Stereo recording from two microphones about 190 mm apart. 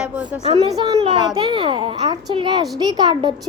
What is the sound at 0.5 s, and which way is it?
A child's voice, 20° right (ahead or behind).